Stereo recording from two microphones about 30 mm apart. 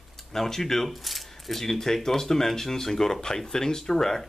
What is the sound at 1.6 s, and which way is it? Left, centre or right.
Speech, centre.